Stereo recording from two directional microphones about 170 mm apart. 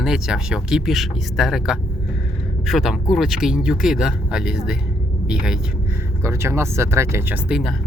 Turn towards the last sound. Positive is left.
turn(degrees=-5)  # may be behind; listen again after turning